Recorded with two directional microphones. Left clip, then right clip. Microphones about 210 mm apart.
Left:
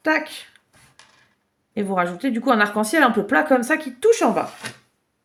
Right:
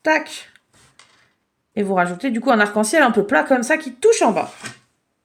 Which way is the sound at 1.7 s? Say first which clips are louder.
Right 3 dB; 20° right (ahead or behind).